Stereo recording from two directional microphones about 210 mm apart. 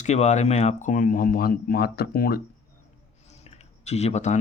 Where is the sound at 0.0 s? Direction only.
35° left (ahead or behind).